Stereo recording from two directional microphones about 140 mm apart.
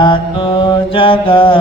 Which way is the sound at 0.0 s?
40° left (ahead or behind).